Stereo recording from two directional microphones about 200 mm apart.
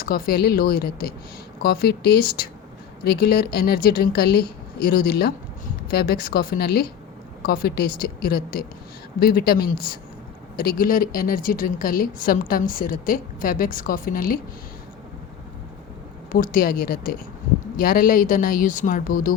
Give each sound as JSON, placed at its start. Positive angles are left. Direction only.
{"t": 0.0, "sound": "a woman's voice", "side_deg": 45}
{"t": 16.3, "sound": "a woman's voice", "side_deg": 45}